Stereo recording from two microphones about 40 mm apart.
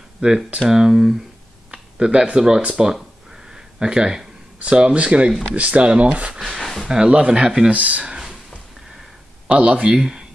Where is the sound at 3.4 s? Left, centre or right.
Centre.